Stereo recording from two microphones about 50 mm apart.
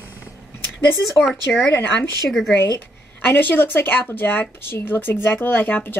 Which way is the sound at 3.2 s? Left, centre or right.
Left.